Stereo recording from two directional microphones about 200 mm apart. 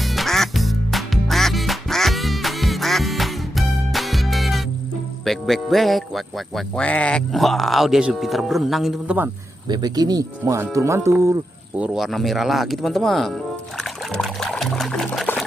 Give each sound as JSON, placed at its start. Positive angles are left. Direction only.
{"t": 0.0, "sound": "quack", "side_deg": 0}
{"t": 5.2, "sound": "speech", "side_deg": 0}
{"t": 9.6, "sound": "speech", "side_deg": -20}
{"t": 11.8, "sound": "speech", "side_deg": 0}